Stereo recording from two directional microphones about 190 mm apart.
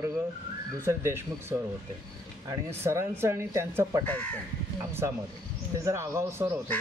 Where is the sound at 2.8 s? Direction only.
15° right (ahead or behind).